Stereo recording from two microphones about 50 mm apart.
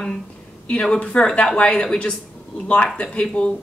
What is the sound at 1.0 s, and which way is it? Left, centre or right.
Speech, left.